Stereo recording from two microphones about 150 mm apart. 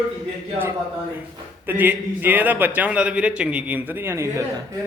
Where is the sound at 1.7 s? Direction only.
10° right (ahead or behind).